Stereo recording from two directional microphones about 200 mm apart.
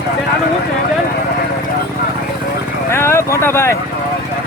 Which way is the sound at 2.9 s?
15° left (ahead or behind).